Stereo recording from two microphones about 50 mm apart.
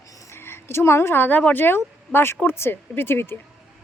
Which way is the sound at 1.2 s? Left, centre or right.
Left.